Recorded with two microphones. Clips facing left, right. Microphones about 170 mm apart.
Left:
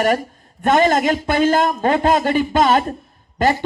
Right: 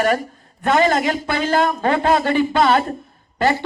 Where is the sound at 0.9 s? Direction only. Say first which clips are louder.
Left 3 dB; 45° left (ahead or behind).